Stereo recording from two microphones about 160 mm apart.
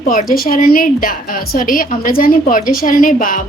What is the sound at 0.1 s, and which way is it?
A woman's voice, 60° left (ahead or behind).